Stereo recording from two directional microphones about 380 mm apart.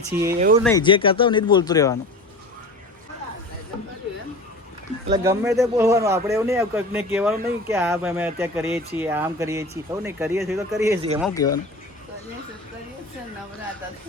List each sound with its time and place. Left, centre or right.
0.1 s speech: centre
0.3 s speech: centre
0.6 s speech: centre
5.0 s speech: centre